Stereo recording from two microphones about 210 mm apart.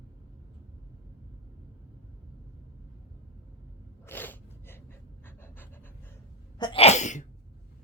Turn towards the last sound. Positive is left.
turn(degrees=35)  # may be behind; listen again after turning